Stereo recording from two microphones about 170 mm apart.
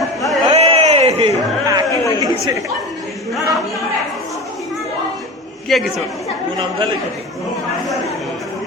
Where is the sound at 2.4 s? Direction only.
20° right (ahead or behind).